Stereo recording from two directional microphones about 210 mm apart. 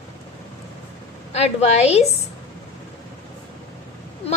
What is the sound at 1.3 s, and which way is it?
Speech, 30° left (ahead or behind).